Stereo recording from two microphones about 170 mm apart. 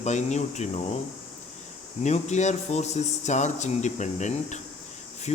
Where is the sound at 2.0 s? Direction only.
45° left (ahead or behind).